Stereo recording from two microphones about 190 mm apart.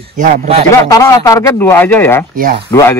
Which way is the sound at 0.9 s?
15° left (ahead or behind).